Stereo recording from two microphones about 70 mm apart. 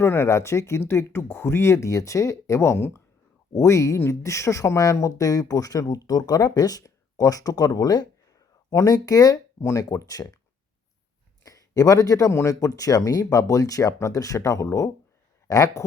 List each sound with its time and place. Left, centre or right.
0.0 s speech: left
3.5 s speech: left
8.7 s speech: left
9.6 s speech: left
11.4 s speech: left
12.3 s speech: left
12.5 s speech: left